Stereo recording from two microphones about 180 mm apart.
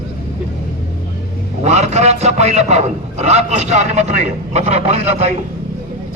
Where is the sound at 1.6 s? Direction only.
35° right (ahead or behind).